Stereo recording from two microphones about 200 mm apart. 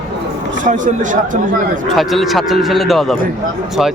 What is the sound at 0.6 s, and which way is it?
Speech, 40° right (ahead or behind).